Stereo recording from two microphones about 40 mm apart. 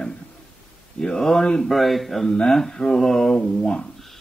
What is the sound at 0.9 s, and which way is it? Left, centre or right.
Speech, centre.